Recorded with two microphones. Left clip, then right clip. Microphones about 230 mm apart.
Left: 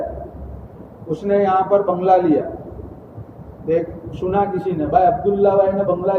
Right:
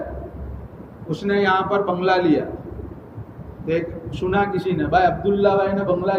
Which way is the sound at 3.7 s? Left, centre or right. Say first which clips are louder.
Left 4 dB; right.